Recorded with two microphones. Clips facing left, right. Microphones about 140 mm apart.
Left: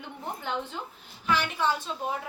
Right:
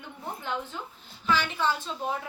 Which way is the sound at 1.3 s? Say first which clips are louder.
Even; 10° left (ahead or behind).